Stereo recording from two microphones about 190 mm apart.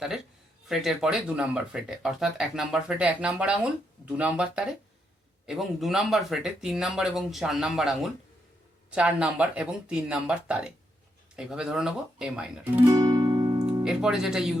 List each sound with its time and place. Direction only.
0.7 s speech: centre (ahead or behind)
12.9 s music: 20° right (ahead or behind)
13.8 s speech: 5° right (ahead or behind)